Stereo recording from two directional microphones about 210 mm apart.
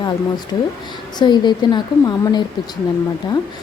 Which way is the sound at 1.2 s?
20° left (ahead or behind).